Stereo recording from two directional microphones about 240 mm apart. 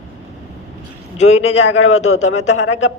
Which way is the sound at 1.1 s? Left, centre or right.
Left.